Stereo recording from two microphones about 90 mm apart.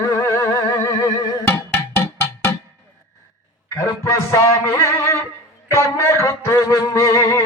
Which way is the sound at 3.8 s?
40° left (ahead or behind).